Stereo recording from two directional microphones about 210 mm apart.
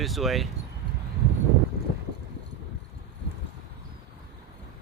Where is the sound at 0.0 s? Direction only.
Centre (ahead or behind).